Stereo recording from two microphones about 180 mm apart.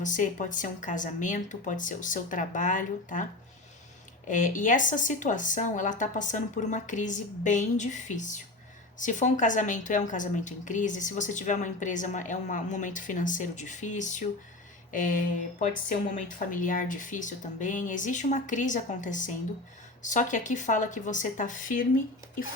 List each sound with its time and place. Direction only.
0.0 s a woman's voice: 45° left (ahead or behind)
4.3 s a woman's voice: 45° left (ahead or behind)